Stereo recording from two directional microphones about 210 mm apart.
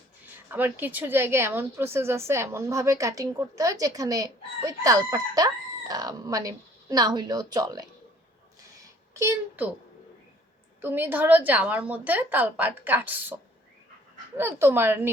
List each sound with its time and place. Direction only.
0.5 s speech: 10° right (ahead or behind)
9.1 s speech: 10° right (ahead or behind)
10.8 s speech: 10° right (ahead or behind)
14.3 s speech: 10° right (ahead or behind)